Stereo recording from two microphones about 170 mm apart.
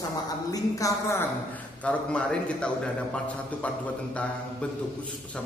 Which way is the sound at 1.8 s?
5° left (ahead or behind).